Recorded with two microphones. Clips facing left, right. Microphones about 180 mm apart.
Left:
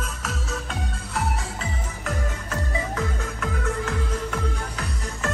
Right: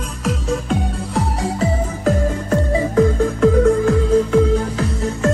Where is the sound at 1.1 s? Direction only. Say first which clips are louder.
Right 8 dB; 35° right (ahead or behind).